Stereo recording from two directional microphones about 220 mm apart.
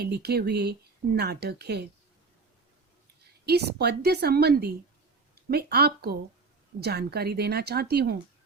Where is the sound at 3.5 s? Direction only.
45° right (ahead or behind).